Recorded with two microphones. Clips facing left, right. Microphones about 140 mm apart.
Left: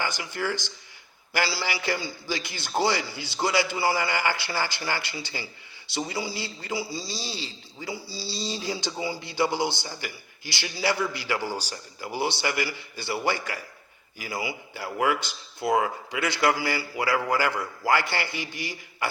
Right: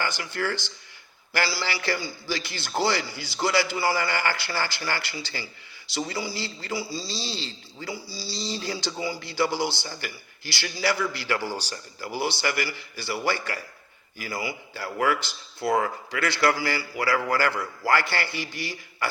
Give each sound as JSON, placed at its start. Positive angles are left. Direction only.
{"t": 0.0, "sound": "a man's voice", "side_deg": 10}
{"t": 7.9, "sound": "a man's voice", "side_deg": 20}